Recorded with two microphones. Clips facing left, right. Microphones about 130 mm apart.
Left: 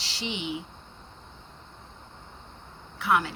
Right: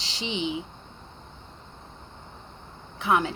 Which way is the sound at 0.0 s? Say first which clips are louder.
Right 4 dB; 20° right (ahead or behind).